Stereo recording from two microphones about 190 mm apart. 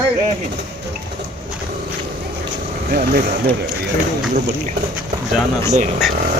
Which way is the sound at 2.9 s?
55° right (ahead or behind).